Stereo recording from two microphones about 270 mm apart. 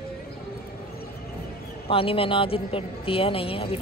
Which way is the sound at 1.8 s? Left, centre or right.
Centre.